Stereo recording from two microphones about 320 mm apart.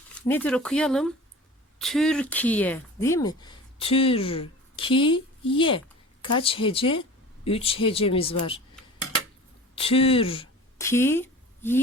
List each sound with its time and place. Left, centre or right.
0.1 s speech: centre
9.7 s speech: centre